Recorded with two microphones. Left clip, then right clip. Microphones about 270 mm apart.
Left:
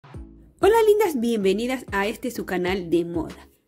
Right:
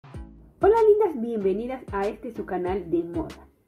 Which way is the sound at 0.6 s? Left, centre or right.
Left.